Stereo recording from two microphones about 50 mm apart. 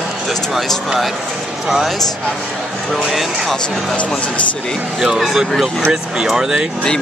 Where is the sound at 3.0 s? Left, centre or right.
Centre.